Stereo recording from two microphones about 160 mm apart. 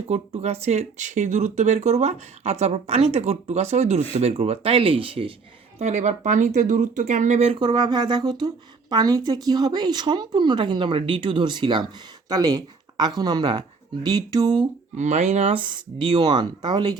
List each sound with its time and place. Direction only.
0.1 s speech: 40° right (ahead or behind)
5.8 s a woman's voice: 45° right (ahead or behind); by 14.7 s 25° right (ahead or behind)
14.9 s a woman's voice: 45° right (ahead or behind); by 17.0 s 30° right (ahead or behind)